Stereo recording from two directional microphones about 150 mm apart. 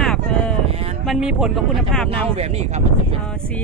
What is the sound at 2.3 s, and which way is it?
Speech, 45° right (ahead or behind).